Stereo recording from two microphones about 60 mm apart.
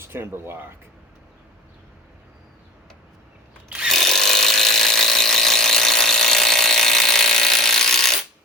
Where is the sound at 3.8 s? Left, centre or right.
Centre.